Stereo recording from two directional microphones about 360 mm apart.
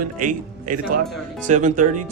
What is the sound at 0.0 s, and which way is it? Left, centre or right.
Speech, right.